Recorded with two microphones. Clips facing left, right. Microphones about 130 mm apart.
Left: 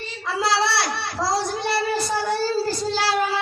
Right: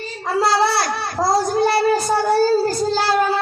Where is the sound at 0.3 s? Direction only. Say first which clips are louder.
Right 5 dB; 45° right (ahead or behind).